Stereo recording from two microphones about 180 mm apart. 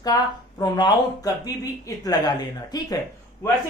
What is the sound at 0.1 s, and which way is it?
A man's voice, 20° left (ahead or behind).